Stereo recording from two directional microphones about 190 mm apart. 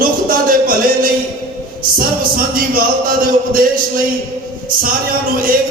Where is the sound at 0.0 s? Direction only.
50° right (ahead or behind).